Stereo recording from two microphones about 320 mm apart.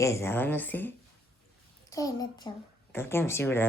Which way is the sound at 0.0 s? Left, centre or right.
Centre.